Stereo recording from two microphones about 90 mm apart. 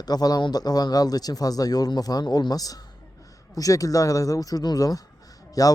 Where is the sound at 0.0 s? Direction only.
50° left (ahead or behind).